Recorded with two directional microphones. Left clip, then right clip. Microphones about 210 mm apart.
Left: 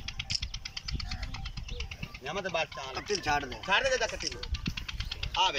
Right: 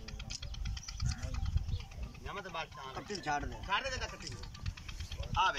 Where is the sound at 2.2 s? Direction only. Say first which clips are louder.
Left 9 dB; 30° left (ahead or behind).